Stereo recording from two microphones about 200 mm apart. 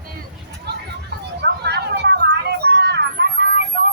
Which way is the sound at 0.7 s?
55° right (ahead or behind).